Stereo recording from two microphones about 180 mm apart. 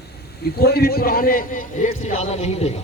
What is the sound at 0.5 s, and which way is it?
A man's voice, 60° left (ahead or behind).